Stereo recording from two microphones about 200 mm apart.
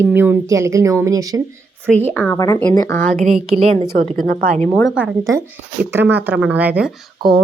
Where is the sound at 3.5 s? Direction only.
30° right (ahead or behind).